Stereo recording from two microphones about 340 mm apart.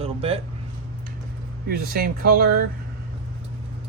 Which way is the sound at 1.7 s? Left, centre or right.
Right.